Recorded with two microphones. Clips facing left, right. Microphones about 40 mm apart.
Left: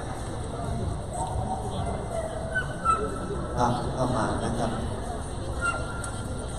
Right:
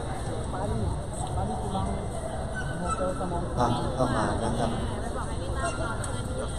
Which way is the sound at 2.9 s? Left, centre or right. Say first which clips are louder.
Left 7 dB; left.